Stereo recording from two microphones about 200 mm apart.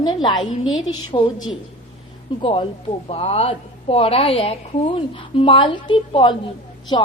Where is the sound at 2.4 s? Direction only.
30° left (ahead or behind).